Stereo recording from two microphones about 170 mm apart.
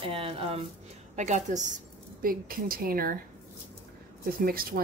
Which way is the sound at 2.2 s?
60° right (ahead or behind).